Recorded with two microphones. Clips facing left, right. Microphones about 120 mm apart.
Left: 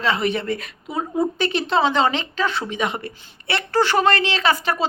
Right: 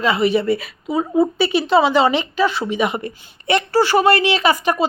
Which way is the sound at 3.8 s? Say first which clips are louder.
Right 2 dB; 5° right (ahead or behind).